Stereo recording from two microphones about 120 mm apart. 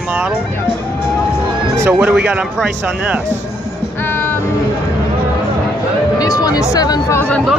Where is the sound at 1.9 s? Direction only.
10° right (ahead or behind).